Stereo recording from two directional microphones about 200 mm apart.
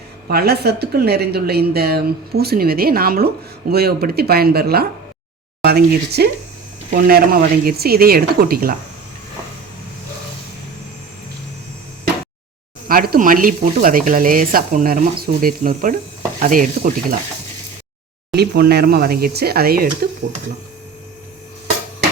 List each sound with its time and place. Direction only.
0.3 s speech: 50° right (ahead or behind)
12.9 s speech: 45° right (ahead or behind)
18.3 s speech: 50° right (ahead or behind)